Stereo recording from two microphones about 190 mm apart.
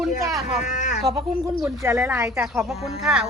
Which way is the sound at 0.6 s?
40° left (ahead or behind).